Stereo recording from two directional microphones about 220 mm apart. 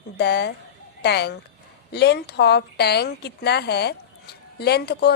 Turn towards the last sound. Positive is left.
turn(degrees=50)  # may be behind; listen again after turning